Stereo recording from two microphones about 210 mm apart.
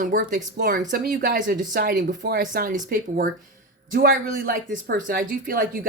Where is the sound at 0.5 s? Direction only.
50° right (ahead or behind).